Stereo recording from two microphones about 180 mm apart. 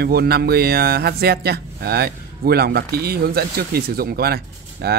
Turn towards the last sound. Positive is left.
turn(degrees=-60)  # may be behind; listen again after turning